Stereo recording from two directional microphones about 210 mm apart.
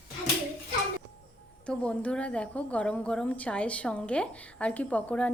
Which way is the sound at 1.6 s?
5° left (ahead or behind).